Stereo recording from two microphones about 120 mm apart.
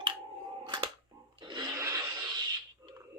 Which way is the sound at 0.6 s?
40° right (ahead or behind).